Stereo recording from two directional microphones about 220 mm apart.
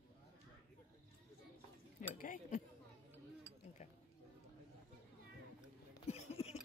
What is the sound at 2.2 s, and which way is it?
Speech, 35° left (ahead or behind).